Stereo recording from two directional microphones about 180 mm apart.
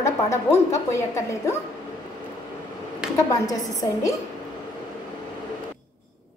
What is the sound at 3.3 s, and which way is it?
Speech, 20° left (ahead or behind).